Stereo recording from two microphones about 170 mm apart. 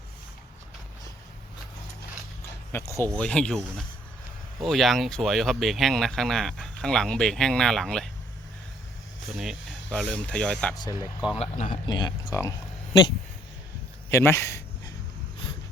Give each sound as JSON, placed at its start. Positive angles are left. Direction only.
{"t": 2.7, "sound": "speech", "side_deg": 15}
{"t": 9.2, "sound": "speech", "side_deg": 0}
{"t": 10.8, "sound": "speech", "side_deg": 20}
{"t": 11.3, "sound": "speech", "side_deg": 50}
{"t": 11.9, "sound": "speech", "side_deg": 25}
{"t": 14.1, "sound": "a sound", "side_deg": 15}